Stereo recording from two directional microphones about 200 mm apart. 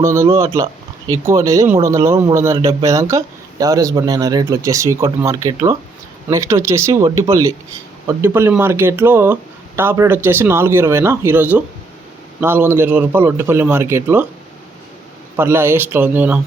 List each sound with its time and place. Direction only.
0.0 s speech: 15° right (ahead or behind)
15.4 s speech: 10° right (ahead or behind)